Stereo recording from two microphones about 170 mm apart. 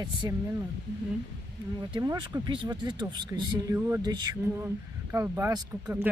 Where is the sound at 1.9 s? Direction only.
25° right (ahead or behind).